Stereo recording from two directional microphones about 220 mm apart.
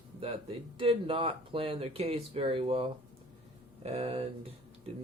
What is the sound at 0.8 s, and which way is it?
Speech, 25° right (ahead or behind).